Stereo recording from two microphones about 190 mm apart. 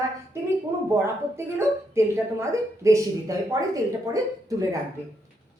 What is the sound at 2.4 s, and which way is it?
A woman's voice, 15° right (ahead or behind).